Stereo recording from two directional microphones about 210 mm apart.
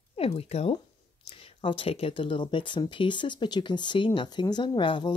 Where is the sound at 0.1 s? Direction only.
30° left (ahead or behind).